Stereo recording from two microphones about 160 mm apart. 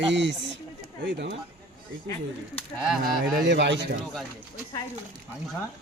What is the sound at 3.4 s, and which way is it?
Speech, 90° right.